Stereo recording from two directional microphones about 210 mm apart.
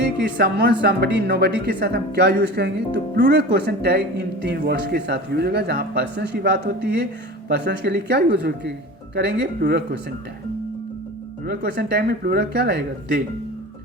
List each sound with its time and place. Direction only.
0.2 s speech: 55° right (ahead or behind)
11.4 s speech: 50° right (ahead or behind)